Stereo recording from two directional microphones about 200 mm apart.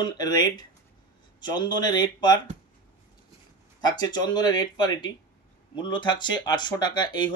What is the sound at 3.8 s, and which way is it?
Speech, 20° left (ahead or behind).